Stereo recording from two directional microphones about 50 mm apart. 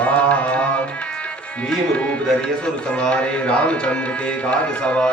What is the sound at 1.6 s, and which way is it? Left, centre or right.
Music, left.